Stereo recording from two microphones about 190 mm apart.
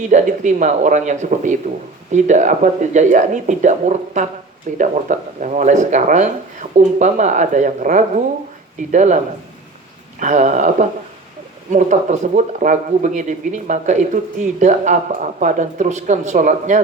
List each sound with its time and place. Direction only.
0.0 s speech: 40° right (ahead or behind)